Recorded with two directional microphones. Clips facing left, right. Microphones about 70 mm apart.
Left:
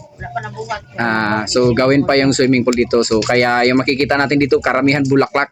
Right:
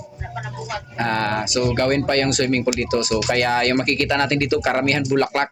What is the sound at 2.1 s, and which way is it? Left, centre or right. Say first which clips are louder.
Speech: left 7 dB; left.